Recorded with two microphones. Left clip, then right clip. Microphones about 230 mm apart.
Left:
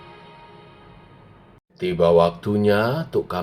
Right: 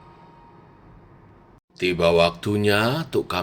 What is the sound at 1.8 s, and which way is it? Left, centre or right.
Speech, right.